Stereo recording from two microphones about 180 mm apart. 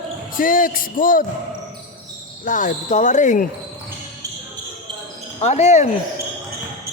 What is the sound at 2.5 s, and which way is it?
Speech, 45° left (ahead or behind).